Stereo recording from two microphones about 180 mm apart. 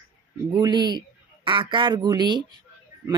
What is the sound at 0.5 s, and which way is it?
Speech, 25° right (ahead or behind).